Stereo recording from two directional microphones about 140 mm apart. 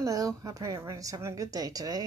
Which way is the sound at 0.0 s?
25° right (ahead or behind).